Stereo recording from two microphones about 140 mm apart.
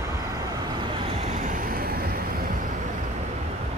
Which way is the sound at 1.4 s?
70° right (ahead or behind).